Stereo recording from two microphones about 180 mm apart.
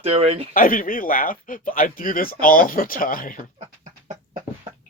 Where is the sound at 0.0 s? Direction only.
35° right (ahead or behind).